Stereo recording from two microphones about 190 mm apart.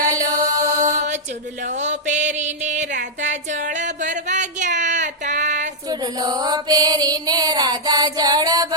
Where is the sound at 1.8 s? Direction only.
40° right (ahead or behind).